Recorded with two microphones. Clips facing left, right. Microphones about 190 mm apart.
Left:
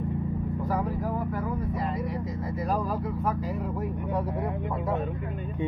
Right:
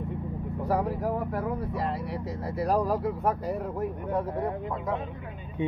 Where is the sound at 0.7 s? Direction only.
70° right (ahead or behind).